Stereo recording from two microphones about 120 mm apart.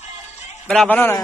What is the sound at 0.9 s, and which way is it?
Speech, 20° left (ahead or behind).